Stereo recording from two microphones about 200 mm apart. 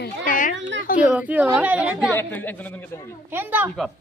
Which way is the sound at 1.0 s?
5° right (ahead or behind).